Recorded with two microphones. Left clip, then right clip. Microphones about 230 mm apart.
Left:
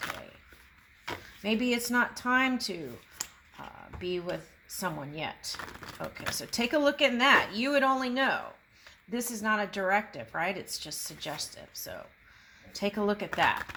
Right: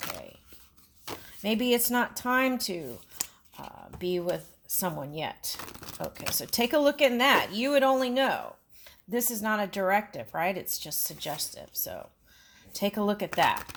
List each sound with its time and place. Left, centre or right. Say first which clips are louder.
1.4 s speech: right 4 dB; right
4.8 s speech: right 2 dB; right
5.5 s a sound: right 1 dB; right
6.3 s speech: right 4 dB; right